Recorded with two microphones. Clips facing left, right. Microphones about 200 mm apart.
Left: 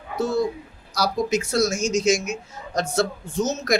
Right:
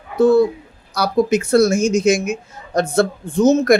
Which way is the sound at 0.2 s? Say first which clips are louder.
Right 10 dB; 55° right (ahead or behind).